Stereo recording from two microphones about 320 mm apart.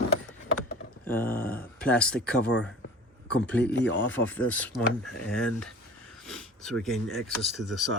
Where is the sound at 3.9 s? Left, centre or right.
Left.